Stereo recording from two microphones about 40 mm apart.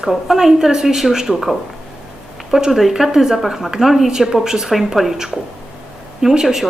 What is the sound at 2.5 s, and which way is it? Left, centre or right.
A woman's voice, centre.